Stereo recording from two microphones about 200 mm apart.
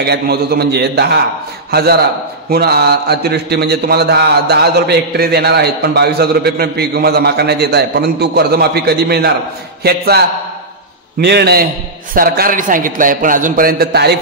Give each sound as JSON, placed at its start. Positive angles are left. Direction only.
{"t": 0.0, "sound": "a man's voice", "side_deg": -55}